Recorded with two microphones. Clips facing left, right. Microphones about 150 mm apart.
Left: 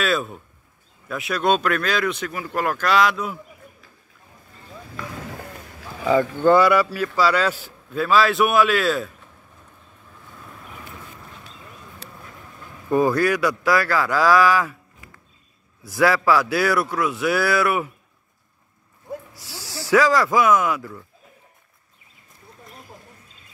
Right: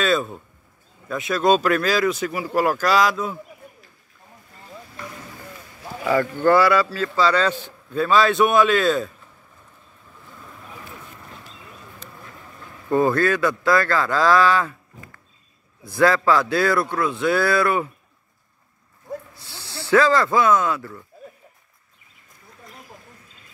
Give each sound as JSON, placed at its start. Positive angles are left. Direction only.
{"t": 0.0, "sound": "a man's voice", "side_deg": 0}
{"t": 6.0, "sound": "a man's voice", "side_deg": 15}
{"t": 12.9, "sound": "speech", "side_deg": 10}
{"t": 19.6, "sound": "a sound", "side_deg": 90}
{"t": 19.9, "sound": "speech", "side_deg": 10}